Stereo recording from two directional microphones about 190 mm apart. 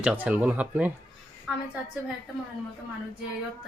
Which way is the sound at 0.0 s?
5° right (ahead or behind).